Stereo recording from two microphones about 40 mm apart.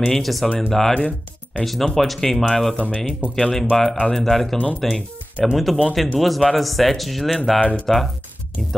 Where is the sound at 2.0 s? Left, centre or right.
Centre.